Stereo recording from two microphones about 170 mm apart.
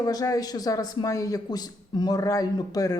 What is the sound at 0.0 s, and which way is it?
Speech, 20° left (ahead or behind).